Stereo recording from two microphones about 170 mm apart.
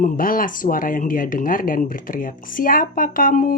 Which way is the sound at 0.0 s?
55° left (ahead or behind).